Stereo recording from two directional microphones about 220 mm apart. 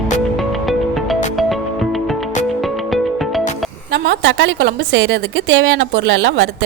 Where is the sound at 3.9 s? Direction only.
50° right (ahead or behind).